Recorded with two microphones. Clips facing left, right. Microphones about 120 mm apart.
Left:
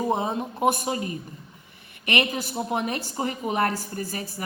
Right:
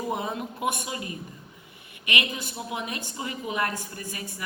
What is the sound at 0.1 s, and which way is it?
A woman's voice, 30° left (ahead or behind).